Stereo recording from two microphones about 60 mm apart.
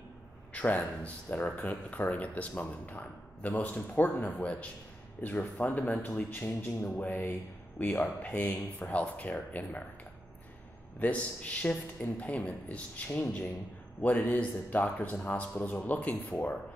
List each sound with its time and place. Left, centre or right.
0.5 s a man's voice: left
11.0 s speech: left